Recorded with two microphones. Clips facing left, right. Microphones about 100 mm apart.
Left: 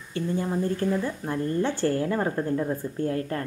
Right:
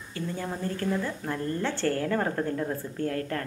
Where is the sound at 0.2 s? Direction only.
25° left (ahead or behind).